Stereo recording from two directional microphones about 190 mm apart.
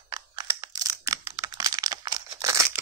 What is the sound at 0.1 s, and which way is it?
Computer keyboard, 20° right (ahead or behind).